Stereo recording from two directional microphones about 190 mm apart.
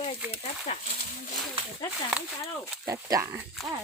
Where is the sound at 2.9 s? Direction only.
20° right (ahead or behind).